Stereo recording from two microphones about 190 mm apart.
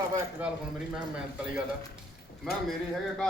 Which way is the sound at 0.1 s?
10° right (ahead or behind).